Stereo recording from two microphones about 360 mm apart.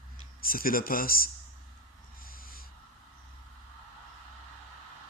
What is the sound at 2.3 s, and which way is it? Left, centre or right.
Snort, left.